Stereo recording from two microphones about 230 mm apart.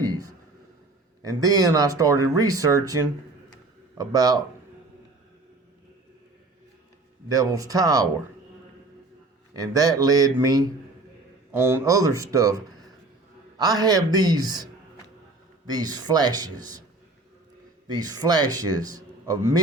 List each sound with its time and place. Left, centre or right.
0.0 s a sound: centre
1.2 s speech: centre
7.3 s speech: centre
9.5 s speech: centre
17.8 s speech: centre